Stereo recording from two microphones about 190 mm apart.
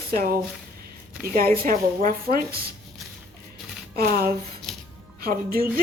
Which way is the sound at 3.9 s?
55° right (ahead or behind).